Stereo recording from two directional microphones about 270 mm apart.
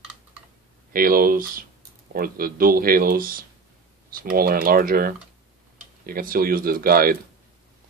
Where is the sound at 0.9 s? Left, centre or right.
Right.